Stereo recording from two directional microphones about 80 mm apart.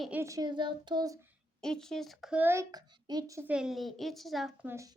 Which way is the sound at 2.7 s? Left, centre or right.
Right.